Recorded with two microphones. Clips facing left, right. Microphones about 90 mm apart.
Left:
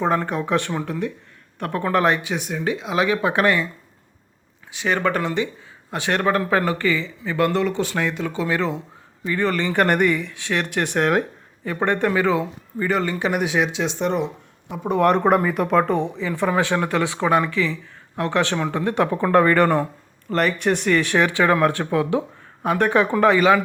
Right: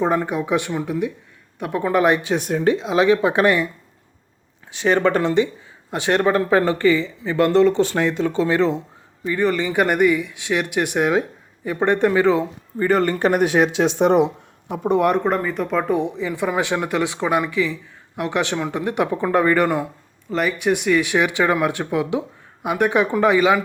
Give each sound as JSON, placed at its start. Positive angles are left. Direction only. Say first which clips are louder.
{"t": 0.0, "sound": "speech", "louder": "right 1 dB", "side_deg": -15}
{"t": 2.5, "sound": "speech", "louder": "right 7 dB", "side_deg": -35}
{"t": 2.8, "sound": "speech", "louder": "right 1 dB", "side_deg": -25}
{"t": 4.7, "sound": "speech", "louder": "right 4 dB", "side_deg": -30}
{"t": 12.9, "sound": "speech", "louder": "right 5 dB", "side_deg": -45}
{"t": 15.2, "sound": "speech", "louder": "left 3 dB", "side_deg": 5}
{"t": 15.9, "sound": "speech", "louder": "right 1 dB", "side_deg": -15}